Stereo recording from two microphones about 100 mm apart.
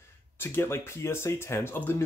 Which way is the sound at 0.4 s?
25° left (ahead or behind).